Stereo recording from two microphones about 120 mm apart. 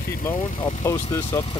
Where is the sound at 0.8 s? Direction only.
25° left (ahead or behind).